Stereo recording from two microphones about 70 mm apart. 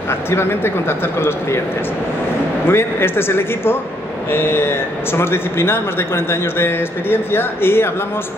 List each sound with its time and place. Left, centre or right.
0.3 s a man's voice: left
2.6 s a man's voice: left